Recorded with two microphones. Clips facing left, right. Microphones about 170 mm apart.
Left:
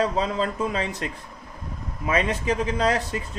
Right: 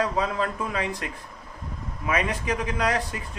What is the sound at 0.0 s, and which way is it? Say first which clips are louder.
Speech: left 2 dB; 25° left (ahead or behind).